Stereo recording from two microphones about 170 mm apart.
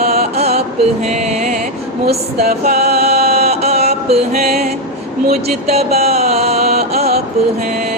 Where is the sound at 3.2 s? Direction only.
65° right (ahead or behind).